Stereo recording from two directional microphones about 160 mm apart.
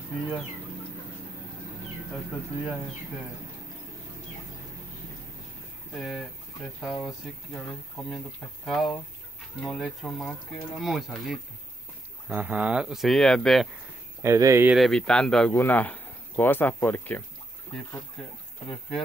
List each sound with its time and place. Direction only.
2.1 s speech: centre (ahead or behind)
5.9 s speech: centre (ahead or behind)
14.2 s speech: 20° right (ahead or behind)
14.7 s speech: centre (ahead or behind)